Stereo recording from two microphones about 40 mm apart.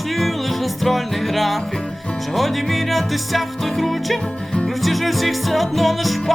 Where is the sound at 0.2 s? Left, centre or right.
Centre.